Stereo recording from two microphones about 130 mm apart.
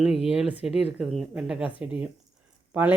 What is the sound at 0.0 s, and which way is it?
Speech, 5° right (ahead or behind).